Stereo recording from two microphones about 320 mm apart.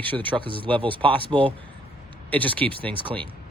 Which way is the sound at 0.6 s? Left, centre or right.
Centre.